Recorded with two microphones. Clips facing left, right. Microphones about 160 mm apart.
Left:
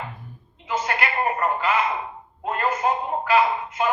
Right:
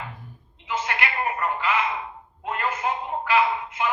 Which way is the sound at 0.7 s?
40° left (ahead or behind).